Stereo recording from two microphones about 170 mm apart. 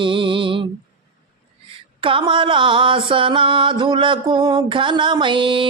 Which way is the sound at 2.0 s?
30° right (ahead or behind).